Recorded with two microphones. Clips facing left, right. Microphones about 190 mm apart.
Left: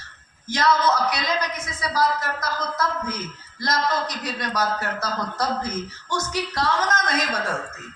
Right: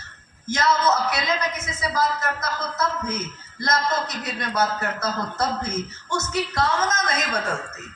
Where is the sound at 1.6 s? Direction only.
25° right (ahead or behind).